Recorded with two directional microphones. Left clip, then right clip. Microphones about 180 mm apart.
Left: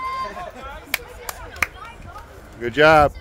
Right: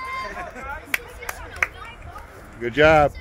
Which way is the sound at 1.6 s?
30° left (ahead or behind).